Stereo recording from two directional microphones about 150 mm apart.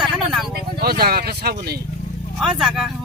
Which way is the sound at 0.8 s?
90° right.